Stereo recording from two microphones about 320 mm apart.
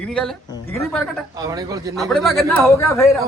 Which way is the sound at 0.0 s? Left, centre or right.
Centre.